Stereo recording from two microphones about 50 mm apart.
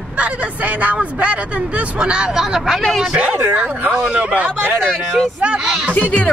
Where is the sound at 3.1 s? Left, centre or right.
Right.